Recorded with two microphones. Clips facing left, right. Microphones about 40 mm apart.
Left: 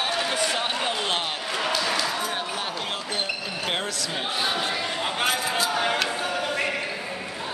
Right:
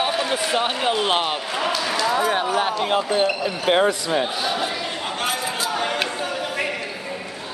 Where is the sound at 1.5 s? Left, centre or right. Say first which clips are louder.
Right 2 dB; centre.